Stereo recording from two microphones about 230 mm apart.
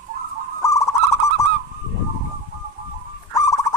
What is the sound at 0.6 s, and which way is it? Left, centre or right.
Owl, centre.